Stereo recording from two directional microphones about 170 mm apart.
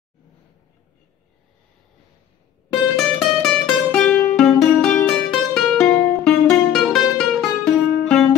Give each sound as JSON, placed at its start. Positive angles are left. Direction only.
{"t": 2.7, "sound": "music", "side_deg": 5}